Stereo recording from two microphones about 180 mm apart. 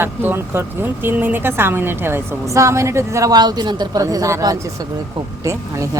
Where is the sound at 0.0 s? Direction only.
10° right (ahead or behind).